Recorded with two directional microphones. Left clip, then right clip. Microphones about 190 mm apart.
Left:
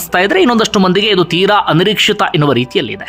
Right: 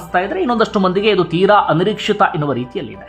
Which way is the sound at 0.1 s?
30° left (ahead or behind).